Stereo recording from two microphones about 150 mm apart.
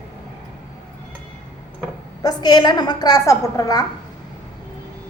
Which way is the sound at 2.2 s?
25° left (ahead or behind).